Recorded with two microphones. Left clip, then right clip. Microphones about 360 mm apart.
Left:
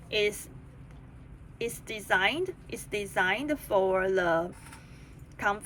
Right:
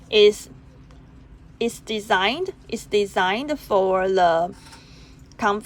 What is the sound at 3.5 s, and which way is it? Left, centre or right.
Speech, right.